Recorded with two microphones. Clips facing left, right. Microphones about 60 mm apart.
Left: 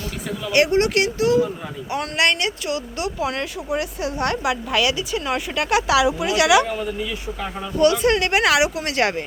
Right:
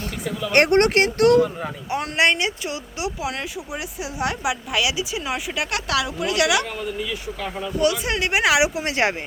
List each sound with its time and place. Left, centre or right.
0.5 s speech: right
1.9 s speech: right
3.2 s speech: centre